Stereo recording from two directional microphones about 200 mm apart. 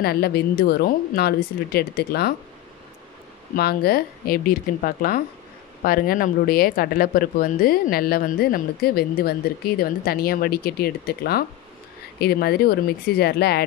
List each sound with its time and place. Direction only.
0.0 s speech: 50° left (ahead or behind)
3.5 s speech: 50° left (ahead or behind)